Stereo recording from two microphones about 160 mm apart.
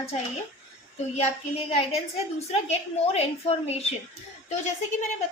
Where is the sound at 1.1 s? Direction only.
40° left (ahead or behind).